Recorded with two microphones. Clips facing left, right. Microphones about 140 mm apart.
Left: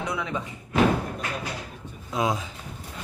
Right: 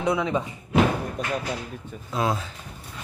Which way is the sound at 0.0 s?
25° right (ahead or behind).